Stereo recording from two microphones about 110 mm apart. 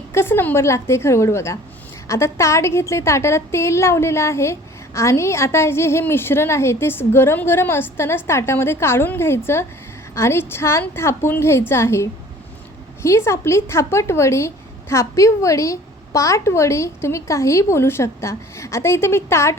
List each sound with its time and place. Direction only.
0.1 s a woman's voice: 20° left (ahead or behind)